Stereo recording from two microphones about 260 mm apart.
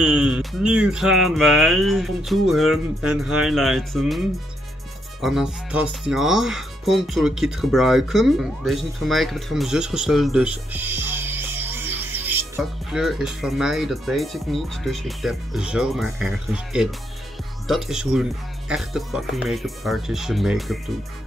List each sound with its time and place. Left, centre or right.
0.0 s speech: centre
5.2 s speech: centre